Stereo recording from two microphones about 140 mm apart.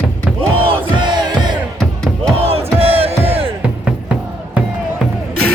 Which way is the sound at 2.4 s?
45° right (ahead or behind).